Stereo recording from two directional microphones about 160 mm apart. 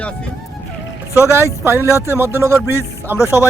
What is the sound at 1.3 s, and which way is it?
Speech, 15° right (ahead or behind).